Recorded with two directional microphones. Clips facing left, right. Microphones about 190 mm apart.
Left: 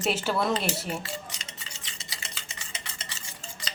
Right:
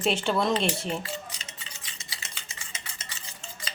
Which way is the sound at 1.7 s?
30° left (ahead or behind).